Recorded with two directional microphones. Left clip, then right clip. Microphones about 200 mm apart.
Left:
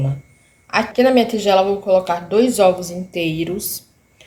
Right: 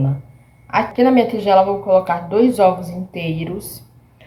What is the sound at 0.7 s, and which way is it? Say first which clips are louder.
A woman's voice: even; 55° left (ahead or behind).